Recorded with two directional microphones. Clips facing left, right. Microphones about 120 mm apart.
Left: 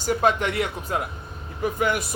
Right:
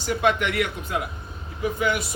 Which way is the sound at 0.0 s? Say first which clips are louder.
Left 1 dB; 40° left (ahead or behind).